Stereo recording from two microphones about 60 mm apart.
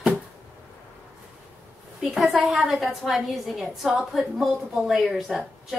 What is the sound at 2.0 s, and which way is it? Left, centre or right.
A woman's voice, centre.